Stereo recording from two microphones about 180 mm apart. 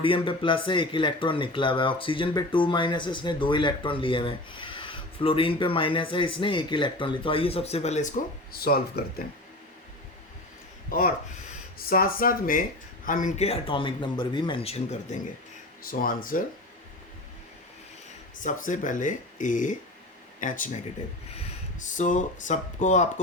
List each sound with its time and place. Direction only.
0.0 s speech: 30° left (ahead or behind)
8.5 s speech: 60° left (ahead or behind)
11.9 s a man's voice: 55° left (ahead or behind); by 15.2 s 35° left (ahead or behind)
15.9 s speech: 50° left (ahead or behind)
18.4 s speech: 45° left (ahead or behind)
21.9 s speech: 45° left (ahead or behind)